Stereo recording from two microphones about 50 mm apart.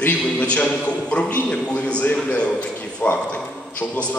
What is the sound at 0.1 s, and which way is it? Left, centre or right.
A man's voice, left.